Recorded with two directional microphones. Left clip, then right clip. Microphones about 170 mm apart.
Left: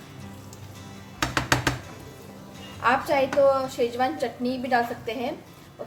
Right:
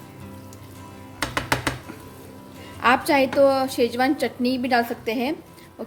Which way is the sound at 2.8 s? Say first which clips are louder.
Right 4 dB; 65° right (ahead or behind).